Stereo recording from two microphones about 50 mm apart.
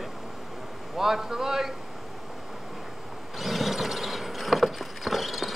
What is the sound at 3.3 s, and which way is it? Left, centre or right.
Vehicle, centre.